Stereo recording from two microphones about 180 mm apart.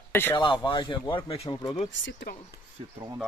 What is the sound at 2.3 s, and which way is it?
Speech, 55° left (ahead or behind).